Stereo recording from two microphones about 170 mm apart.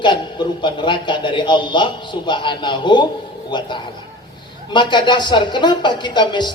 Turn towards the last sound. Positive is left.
turn(degrees=25)  # may be behind; listen again after turning